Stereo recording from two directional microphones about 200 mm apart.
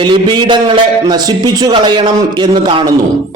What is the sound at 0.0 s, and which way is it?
A man's voice, 25° right (ahead or behind).